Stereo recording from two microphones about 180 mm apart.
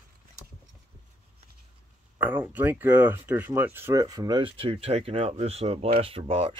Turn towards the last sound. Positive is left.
turn(degrees=-30)  # may be behind; listen again after turning